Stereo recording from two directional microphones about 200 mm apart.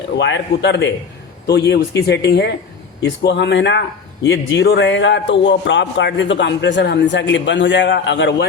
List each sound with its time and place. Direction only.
0.2 s speech: 65° left (ahead or behind)